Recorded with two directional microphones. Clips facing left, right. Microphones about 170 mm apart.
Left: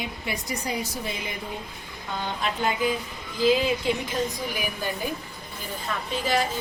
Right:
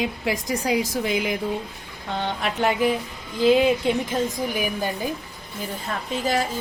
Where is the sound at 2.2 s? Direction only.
70° right (ahead or behind).